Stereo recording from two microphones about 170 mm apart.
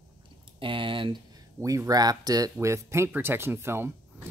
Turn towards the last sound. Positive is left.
turn(degrees=-15)  # may be behind; listen again after turning